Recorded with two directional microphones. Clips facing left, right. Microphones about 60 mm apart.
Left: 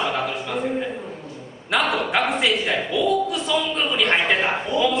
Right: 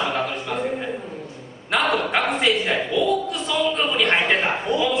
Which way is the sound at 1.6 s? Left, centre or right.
Centre.